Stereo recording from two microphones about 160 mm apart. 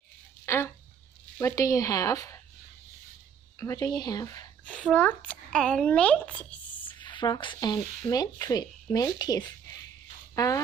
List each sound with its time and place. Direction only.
0.4 s a sound: 15° left (ahead or behind)
1.4 s speech: 20° left (ahead or behind)
3.6 s speech: 20° left (ahead or behind)
4.6 s a child's voice: 10° left (ahead or behind)
6.8 s speech: 30° left (ahead or behind)